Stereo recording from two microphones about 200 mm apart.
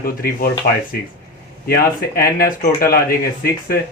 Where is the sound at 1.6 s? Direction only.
50° left (ahead or behind).